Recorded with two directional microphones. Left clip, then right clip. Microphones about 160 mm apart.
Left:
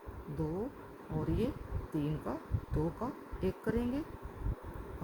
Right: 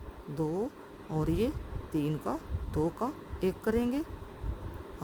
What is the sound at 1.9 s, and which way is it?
Speech, 70° right (ahead or behind).